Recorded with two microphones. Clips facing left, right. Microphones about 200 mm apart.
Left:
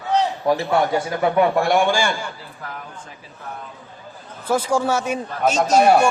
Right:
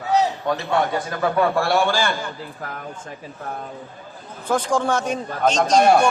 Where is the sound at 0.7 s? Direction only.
25° left (ahead or behind).